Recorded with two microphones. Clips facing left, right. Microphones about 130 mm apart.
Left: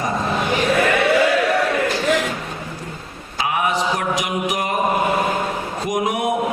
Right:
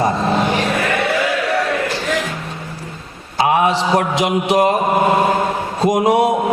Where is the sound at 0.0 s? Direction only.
30° right (ahead or behind).